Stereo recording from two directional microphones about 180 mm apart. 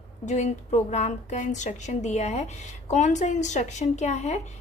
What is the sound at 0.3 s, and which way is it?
Speech, 40° left (ahead or behind).